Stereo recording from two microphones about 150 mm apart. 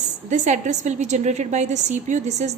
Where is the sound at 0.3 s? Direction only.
50° right (ahead or behind).